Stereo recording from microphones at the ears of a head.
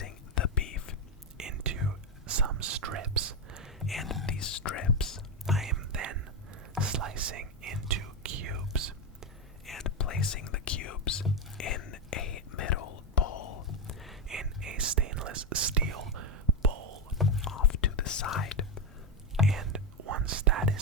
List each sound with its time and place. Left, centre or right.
0.0 s whispering: left
1.4 s whispering: right
3.8 s whispering: left
5.7 s whispering: right
9.8 s whispering: left
14.6 s whispering: right
17.2 s whispering: left
19.5 s whispering: right